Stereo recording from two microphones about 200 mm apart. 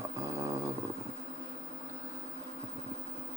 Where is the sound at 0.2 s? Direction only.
15° right (ahead or behind).